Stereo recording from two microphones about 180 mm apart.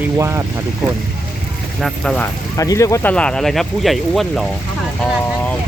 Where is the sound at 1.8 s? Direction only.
Centre (ahead or behind).